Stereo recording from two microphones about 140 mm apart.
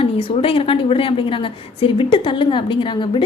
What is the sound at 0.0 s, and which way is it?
A woman's voice, 40° left (ahead or behind).